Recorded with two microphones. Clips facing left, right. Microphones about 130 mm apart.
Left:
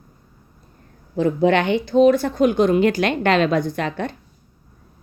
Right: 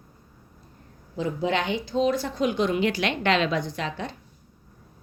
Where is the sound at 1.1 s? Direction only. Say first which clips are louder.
Left 9 dB; 60° left (ahead or behind).